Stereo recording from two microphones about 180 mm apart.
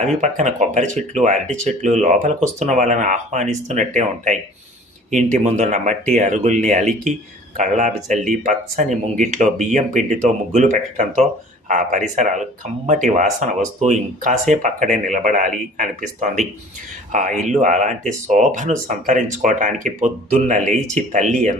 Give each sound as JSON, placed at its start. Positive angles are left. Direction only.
{"t": 0.0, "sound": "speech", "side_deg": -40}